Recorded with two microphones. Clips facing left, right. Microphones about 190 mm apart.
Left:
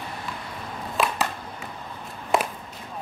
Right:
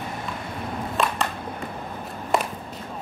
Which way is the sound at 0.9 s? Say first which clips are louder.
Even; 5° left (ahead or behind).